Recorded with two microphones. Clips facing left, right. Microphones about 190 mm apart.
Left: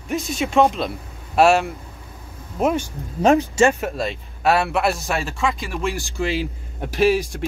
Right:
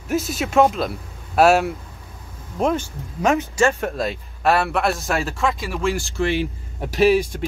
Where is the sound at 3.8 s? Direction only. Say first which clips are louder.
Right 1 dB; centre (ahead or behind).